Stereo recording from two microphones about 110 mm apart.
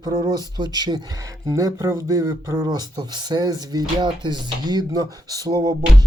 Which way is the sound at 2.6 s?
40° right (ahead or behind).